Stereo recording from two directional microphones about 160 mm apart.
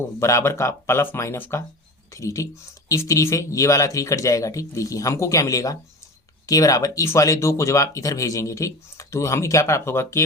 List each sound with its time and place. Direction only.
0.0 s speech: 20° left (ahead or behind)